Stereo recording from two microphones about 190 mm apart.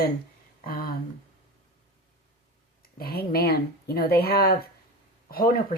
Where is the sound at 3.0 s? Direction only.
55° left (ahead or behind).